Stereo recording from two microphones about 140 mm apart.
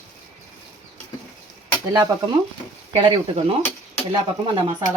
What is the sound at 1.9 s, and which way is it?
Speech, 30° right (ahead or behind).